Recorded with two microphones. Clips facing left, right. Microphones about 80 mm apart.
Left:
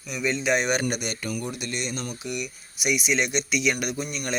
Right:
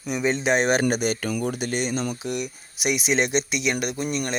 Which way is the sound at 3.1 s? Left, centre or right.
Right.